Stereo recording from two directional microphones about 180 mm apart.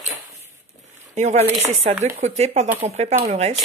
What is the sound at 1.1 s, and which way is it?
Speech, 40° right (ahead or behind).